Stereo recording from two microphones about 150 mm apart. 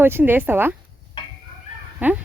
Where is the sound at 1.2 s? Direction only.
35° left (ahead or behind).